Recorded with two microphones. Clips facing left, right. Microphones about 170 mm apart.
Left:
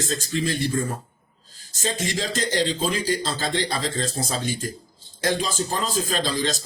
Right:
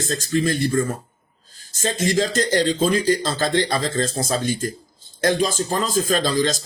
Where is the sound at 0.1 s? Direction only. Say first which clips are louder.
Right 6 dB; 45° right (ahead or behind).